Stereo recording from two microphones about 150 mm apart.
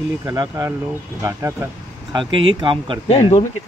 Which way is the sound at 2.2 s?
35° right (ahead or behind).